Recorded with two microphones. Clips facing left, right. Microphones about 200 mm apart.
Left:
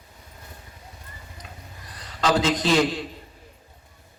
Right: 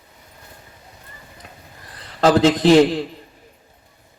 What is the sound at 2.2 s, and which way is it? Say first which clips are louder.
Speech: right 7 dB; 65° right (ahead or behind).